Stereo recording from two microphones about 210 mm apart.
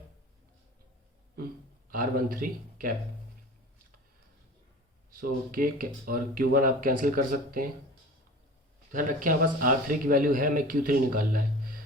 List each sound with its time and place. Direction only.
1.9 s speech: 45° right (ahead or behind)
5.1 s speech: 45° right (ahead or behind)
8.9 s speech: 40° right (ahead or behind)